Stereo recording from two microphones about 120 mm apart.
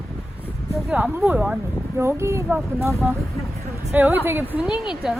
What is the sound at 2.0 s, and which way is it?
Speech, 20° right (ahead or behind).